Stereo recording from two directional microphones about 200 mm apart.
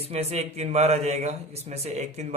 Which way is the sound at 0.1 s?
30° right (ahead or behind).